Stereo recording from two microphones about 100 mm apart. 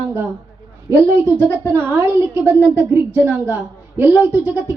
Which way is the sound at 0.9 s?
20° right (ahead or behind).